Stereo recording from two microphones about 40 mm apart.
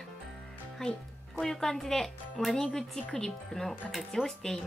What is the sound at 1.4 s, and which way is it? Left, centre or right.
Speech, centre.